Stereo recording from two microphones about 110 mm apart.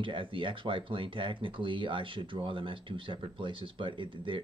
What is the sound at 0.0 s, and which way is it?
Speech, 50° right (ahead or behind).